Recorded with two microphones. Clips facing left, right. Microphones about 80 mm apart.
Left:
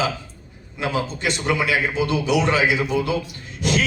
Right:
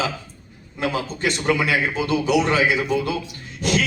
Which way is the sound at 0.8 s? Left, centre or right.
Right.